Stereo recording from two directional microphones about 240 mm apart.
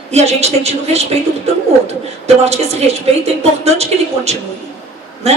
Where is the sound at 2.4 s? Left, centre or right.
Right.